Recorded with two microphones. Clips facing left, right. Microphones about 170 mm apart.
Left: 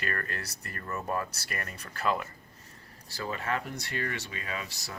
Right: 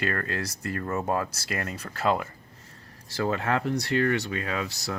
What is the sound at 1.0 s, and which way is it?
Speech, 85° right.